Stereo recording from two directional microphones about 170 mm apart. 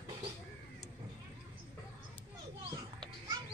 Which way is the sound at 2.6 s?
25° right (ahead or behind).